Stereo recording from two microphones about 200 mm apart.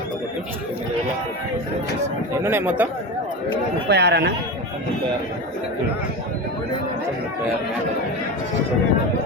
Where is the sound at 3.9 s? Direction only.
55° right (ahead or behind).